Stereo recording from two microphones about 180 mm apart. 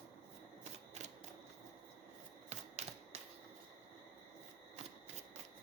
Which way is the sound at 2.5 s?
35° right (ahead or behind).